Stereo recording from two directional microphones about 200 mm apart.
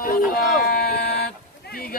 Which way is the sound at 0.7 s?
50° left (ahead or behind).